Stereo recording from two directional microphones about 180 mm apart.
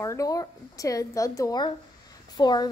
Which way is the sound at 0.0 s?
20° left (ahead or behind).